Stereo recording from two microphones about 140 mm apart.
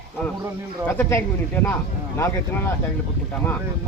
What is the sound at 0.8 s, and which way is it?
Speech, 15° left (ahead or behind).